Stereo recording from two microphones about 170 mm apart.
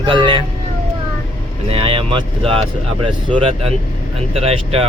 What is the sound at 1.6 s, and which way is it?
Speech, 35° right (ahead or behind).